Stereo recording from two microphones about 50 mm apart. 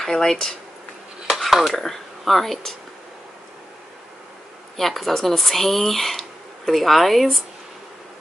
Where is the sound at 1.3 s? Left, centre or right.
Centre.